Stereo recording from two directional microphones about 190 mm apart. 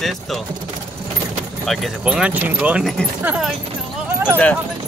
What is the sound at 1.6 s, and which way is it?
Speech, centre (ahead or behind).